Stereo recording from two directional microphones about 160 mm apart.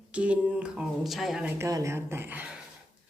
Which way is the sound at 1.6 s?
20° right (ahead or behind).